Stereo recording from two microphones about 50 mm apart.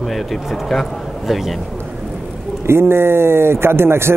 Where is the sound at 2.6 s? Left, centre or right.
Right.